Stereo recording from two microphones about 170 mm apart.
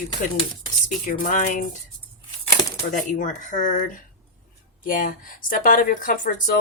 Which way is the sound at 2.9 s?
50° left (ahead or behind).